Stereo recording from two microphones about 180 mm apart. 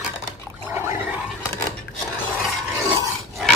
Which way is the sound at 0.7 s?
15° right (ahead or behind).